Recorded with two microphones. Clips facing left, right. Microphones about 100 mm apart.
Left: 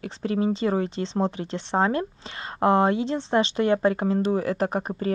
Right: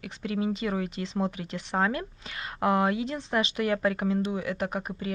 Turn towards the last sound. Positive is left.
turn(degrees=35)  # may be behind; listen again after turning